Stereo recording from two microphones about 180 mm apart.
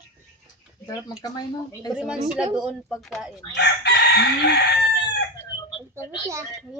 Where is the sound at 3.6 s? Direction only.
65° left (ahead or behind).